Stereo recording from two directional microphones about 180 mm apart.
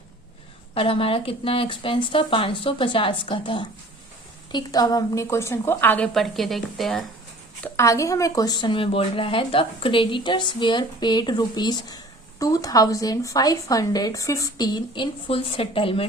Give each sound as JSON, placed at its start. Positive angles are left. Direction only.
{"t": 0.7, "sound": "a woman's voice", "side_deg": 30}
{"t": 7.6, "sound": "a woman's voice", "side_deg": 15}